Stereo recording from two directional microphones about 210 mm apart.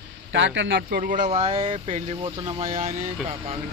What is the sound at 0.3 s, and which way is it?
Speech, 60° right (ahead or behind).